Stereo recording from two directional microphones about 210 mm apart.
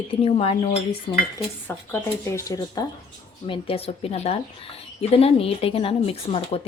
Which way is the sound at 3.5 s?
25° left (ahead or behind).